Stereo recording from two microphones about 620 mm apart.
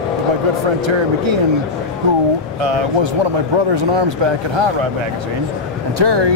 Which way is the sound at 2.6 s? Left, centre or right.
Right.